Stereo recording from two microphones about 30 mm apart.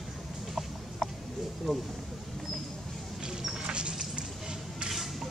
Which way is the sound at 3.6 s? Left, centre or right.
Right.